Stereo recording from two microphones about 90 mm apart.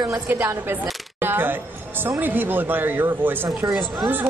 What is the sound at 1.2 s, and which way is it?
A woman's voice, 20° right (ahead or behind).